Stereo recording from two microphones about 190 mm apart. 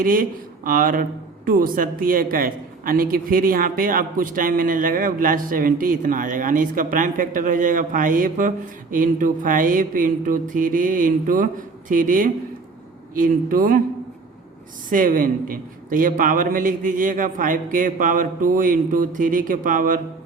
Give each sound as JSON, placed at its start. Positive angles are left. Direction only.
{"t": 0.0, "sound": "a woman's voice", "side_deg": -45}
{"t": 14.8, "sound": "a woman's voice", "side_deg": -45}